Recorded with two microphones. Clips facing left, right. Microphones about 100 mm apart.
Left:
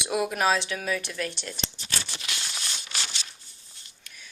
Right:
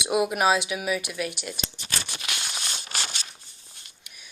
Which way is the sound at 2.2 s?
55° right (ahead or behind).